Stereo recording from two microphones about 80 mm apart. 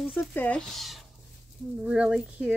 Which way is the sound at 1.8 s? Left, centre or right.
Centre.